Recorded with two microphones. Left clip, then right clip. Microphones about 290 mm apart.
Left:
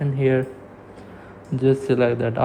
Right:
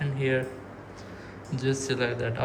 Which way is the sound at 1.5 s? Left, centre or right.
Centre.